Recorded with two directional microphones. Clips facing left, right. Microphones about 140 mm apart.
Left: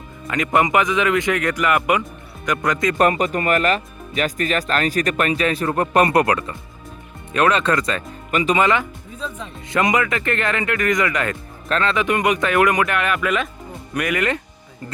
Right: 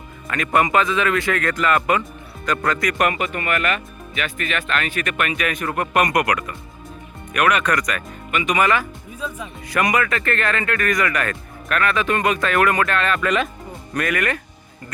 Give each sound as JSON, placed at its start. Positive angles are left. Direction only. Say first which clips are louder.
{"t": 0.3, "sound": "speech", "louder": "left 1 dB", "side_deg": 20}
{"t": 3.0, "sound": "speech", "louder": "left 4 dB", "side_deg": 35}
{"t": 8.5, "sound": "speech", "louder": "right 1 dB", "side_deg": 20}
{"t": 9.1, "sound": "speech", "louder": "even", "side_deg": -10}
{"t": 9.7, "sound": "speech", "louder": "left 1 dB", "side_deg": 20}